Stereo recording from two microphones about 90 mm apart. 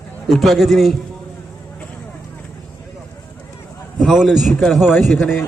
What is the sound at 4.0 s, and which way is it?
A man's voice, centre (ahead or behind).